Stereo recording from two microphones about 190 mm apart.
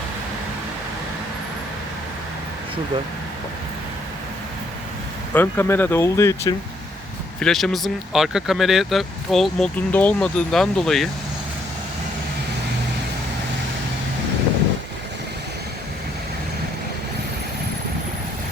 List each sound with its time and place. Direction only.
5.3 s speech: 10° left (ahead or behind)
7.3 s speech: centre (ahead or behind)